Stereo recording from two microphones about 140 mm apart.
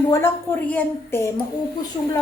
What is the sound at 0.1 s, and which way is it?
A woman's voice, 15° left (ahead or behind).